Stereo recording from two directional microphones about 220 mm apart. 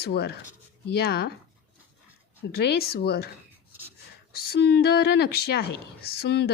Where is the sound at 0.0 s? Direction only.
50° left (ahead or behind).